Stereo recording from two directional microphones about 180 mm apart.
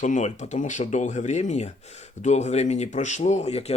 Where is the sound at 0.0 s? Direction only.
40° left (ahead or behind).